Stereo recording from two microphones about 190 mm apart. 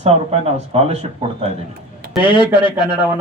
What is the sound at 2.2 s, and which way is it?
Speech, 25° left (ahead or behind).